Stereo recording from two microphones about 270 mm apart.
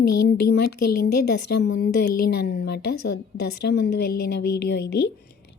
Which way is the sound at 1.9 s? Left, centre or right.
Left.